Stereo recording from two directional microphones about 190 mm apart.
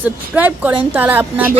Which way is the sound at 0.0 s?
10° right (ahead or behind).